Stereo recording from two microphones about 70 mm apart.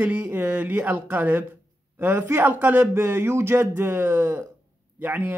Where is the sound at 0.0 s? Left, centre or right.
Right.